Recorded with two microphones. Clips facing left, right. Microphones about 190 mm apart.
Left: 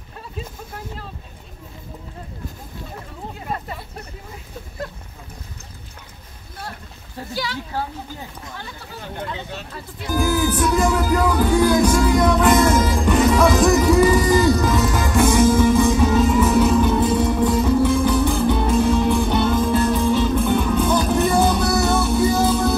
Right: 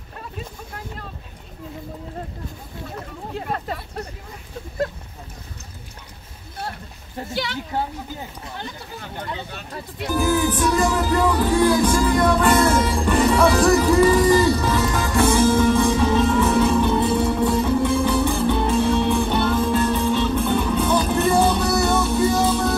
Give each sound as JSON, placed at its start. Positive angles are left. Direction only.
{"t": 7.3, "sound": "speech", "side_deg": -25}
{"t": 10.1, "sound": "music", "side_deg": 5}